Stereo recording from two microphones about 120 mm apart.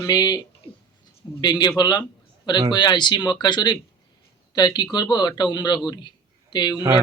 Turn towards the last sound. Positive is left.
turn(degrees=40)  # may be behind; listen again after turning